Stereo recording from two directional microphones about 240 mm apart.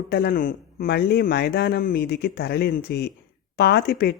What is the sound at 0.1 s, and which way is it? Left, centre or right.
Speech, left.